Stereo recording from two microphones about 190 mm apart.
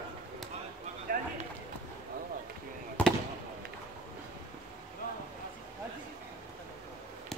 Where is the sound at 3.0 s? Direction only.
5° left (ahead or behind).